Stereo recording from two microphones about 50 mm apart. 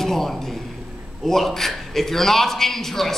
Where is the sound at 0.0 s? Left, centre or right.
Centre.